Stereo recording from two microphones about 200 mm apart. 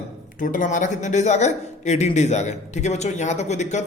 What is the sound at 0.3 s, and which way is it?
A man's voice, 40° left (ahead or behind).